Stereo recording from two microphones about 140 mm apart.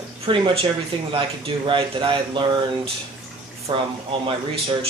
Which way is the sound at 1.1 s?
40° right (ahead or behind).